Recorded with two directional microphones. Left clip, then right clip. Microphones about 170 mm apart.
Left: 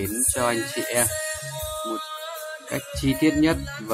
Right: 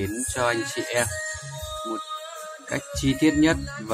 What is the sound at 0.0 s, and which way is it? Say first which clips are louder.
Speech: even; centre (ahead or behind).